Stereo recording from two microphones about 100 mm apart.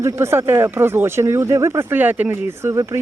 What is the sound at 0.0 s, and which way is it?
Speech, 25° right (ahead or behind).